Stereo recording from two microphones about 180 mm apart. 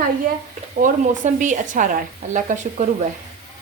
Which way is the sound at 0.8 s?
45° right (ahead or behind).